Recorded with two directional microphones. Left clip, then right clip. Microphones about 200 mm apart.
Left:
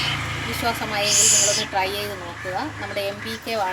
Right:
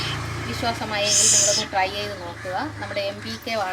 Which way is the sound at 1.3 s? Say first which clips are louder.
Even; centre (ahead or behind).